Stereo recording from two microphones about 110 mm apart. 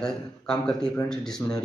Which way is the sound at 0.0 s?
5° left (ahead or behind).